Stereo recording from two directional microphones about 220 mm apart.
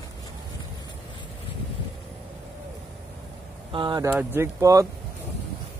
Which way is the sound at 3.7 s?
20° right (ahead or behind).